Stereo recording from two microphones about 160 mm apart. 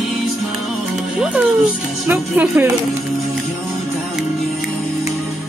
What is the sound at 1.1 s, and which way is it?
Speech, 5° right (ahead or behind).